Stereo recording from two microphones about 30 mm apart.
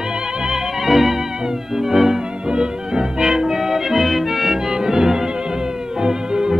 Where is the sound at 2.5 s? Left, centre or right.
Right.